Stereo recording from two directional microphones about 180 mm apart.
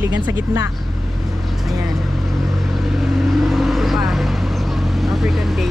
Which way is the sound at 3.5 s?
Centre (ahead or behind).